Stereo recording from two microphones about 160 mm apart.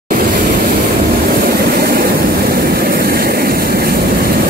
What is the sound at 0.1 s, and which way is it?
Vehicle, 60° right (ahead or behind).